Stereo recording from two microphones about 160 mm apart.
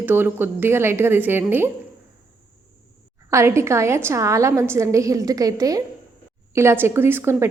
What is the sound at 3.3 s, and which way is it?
A woman's voice, 20° right (ahead or behind).